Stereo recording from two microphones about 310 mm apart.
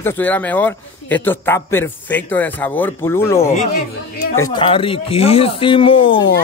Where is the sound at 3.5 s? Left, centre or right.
Left.